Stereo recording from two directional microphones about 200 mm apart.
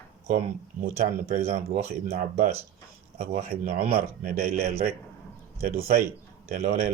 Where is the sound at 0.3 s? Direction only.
45° right (ahead or behind).